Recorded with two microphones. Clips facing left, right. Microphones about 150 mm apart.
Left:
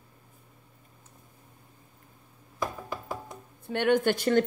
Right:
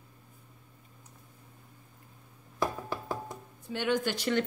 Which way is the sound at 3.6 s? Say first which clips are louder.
Left 6 dB; 55° left (ahead or behind).